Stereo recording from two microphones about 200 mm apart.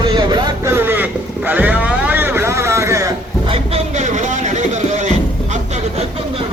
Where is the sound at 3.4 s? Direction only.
30° right (ahead or behind).